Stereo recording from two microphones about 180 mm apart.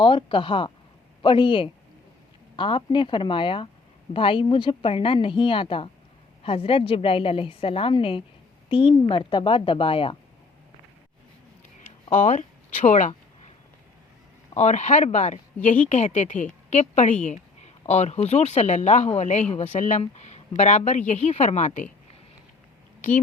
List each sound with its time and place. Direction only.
0.0 s speech: 30° left (ahead or behind)
12.1 s a sound: 45° left (ahead or behind)
14.5 s speech: 40° left (ahead or behind)